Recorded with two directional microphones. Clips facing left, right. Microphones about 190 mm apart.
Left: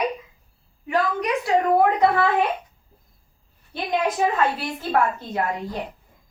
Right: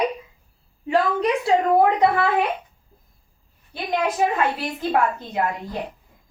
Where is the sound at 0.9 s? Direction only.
30° right (ahead or behind).